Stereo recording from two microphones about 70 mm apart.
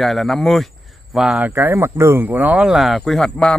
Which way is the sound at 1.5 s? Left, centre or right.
Right.